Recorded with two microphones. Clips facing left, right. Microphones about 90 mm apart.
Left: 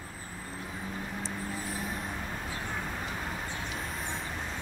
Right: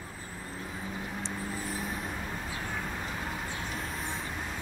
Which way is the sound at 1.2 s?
Centre (ahead or behind).